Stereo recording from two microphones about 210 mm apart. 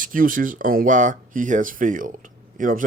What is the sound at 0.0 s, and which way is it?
Speech, 40° right (ahead or behind).